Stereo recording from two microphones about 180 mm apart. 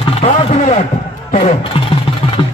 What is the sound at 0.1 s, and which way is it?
A man's voice, 35° left (ahead or behind).